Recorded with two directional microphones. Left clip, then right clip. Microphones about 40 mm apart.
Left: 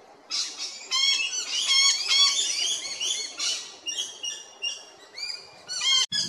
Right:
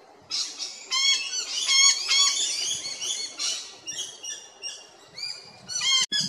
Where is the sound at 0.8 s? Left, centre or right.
Centre.